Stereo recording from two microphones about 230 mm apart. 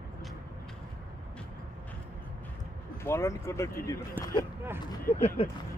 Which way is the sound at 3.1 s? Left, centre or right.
Centre.